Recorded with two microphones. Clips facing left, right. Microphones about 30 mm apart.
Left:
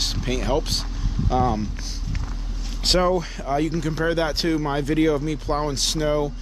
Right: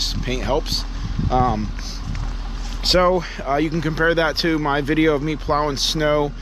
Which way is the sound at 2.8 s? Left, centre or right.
Centre.